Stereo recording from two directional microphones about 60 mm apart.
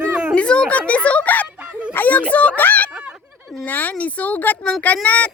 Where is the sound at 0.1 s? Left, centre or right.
Centre.